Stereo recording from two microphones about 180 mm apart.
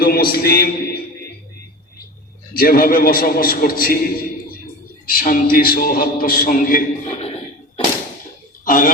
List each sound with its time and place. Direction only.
0.0 s a man's voice: 55° left (ahead or behind)
2.5 s a man's voice: 55° left (ahead or behind)
8.6 s speech: 50° left (ahead or behind)